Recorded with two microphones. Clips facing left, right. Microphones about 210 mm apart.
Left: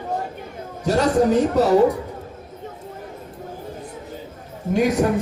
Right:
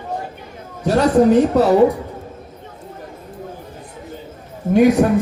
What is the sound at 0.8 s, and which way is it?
Speech, 60° right (ahead or behind).